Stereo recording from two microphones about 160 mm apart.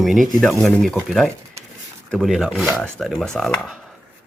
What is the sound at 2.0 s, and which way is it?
Speech, centre (ahead or behind).